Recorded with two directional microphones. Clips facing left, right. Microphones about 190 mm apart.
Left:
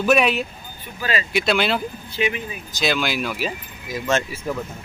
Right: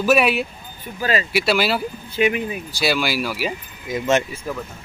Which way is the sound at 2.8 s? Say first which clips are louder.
Right 1 dB; 5° right (ahead or behind).